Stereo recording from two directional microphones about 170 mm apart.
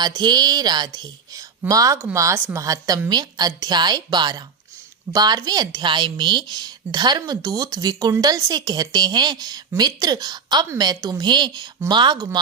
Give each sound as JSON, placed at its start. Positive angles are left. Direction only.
{"t": 0.0, "sound": "a woman's voice", "side_deg": -25}